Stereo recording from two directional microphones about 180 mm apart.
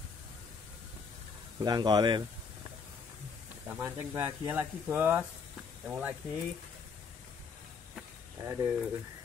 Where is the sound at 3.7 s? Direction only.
15° right (ahead or behind).